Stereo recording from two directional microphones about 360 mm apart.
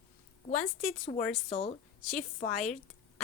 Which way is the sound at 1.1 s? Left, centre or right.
Centre.